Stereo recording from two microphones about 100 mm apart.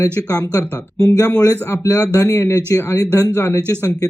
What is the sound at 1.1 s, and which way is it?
Speech, 25° left (ahead or behind).